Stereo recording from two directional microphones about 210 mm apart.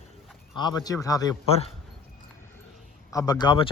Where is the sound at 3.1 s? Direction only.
15° left (ahead or behind).